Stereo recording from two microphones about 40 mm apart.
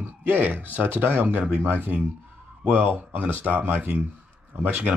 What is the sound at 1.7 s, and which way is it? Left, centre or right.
Speech, right.